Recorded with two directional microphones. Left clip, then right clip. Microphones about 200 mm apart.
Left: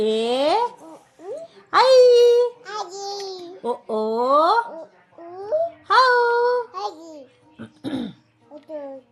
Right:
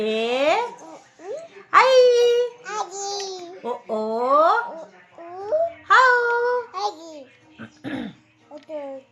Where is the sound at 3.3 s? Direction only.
10° left (ahead or behind).